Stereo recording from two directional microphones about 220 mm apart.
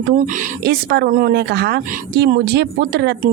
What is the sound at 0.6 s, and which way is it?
Speech, 45° right (ahead or behind).